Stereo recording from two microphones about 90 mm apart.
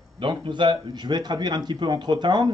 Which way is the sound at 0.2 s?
65° right (ahead or behind).